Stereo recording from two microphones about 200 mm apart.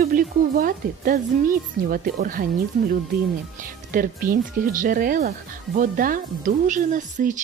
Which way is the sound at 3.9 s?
45° right (ahead or behind).